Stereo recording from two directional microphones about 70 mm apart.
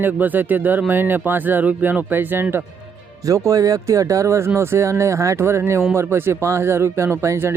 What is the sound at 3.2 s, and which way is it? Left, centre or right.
Speech, right.